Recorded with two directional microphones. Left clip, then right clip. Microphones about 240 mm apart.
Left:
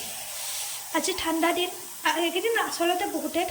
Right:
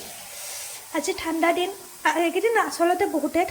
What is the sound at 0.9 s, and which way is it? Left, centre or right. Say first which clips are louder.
A woman's voice: even; centre.